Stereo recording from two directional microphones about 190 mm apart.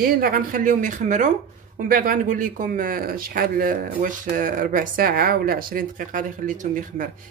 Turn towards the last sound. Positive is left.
turn(degrees=-45)  # may be behind; listen again after turning